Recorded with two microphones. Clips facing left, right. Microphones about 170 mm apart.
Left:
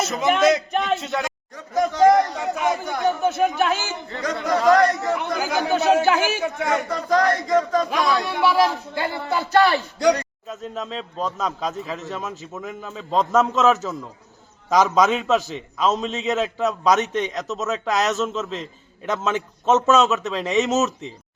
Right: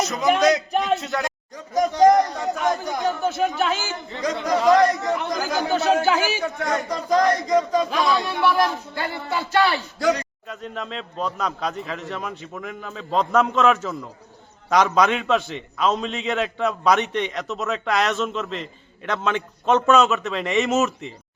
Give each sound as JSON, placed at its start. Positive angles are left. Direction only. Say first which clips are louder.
{"t": 0.0, "sound": "a man's voice", "louder": "even", "side_deg": 0}
{"t": 1.5, "sound": "speech", "louder": "even", "side_deg": -15}
{"t": 2.0, "sound": "a man's voice", "louder": "even", "side_deg": 0}
{"t": 6.9, "sound": "speech", "louder": "right 2 dB", "side_deg": -15}
{"t": 7.3, "sound": "a man's voice", "louder": "even", "side_deg": 0}
{"t": 9.3, "sound": "speech", "louder": "left 3 dB", "side_deg": 40}
{"t": 10.6, "sound": "a man's voice", "louder": "left 1 dB", "side_deg": 0}